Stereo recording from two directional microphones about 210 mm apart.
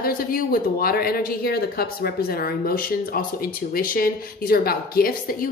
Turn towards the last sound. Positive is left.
turn(degrees=45)  # may be behind; listen again after turning